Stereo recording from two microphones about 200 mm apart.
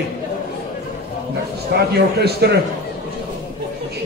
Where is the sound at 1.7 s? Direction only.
55° right (ahead or behind).